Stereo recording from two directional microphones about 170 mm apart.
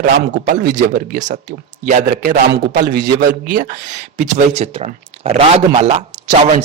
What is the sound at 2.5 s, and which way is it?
A man's voice, 90° right.